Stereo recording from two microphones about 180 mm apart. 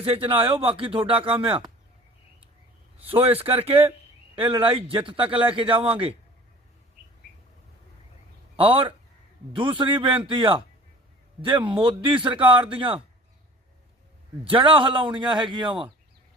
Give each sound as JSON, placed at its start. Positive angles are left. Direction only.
{"t": 0.0, "sound": "speech", "side_deg": -30}
{"t": 3.0, "sound": "speech", "side_deg": -30}
{"t": 8.5, "sound": "speech", "side_deg": -30}
{"t": 14.4, "sound": "speech", "side_deg": -30}